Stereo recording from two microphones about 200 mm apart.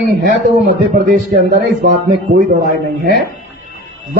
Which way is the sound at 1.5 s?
45° right (ahead or behind).